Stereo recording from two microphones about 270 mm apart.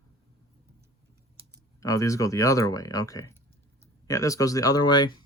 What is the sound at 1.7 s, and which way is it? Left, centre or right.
Speech, centre.